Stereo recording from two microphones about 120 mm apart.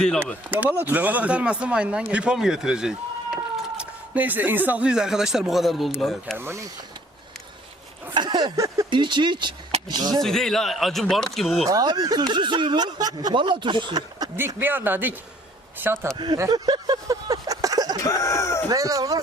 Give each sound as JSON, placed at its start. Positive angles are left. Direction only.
{"t": 0.5, "sound": "speech", "side_deg": -15}
{"t": 6.3, "sound": "speech", "side_deg": -20}
{"t": 8.1, "sound": "a sound", "side_deg": -35}
{"t": 8.9, "sound": "speech", "side_deg": -40}
{"t": 10.2, "sound": "speech", "side_deg": 5}
{"t": 11.7, "sound": "speech", "side_deg": -35}
{"t": 14.3, "sound": "speech", "side_deg": -15}
{"t": 16.1, "sound": "speech", "side_deg": -40}
{"t": 18.0, "sound": "a sound", "side_deg": 25}
{"t": 18.7, "sound": "speech", "side_deg": -30}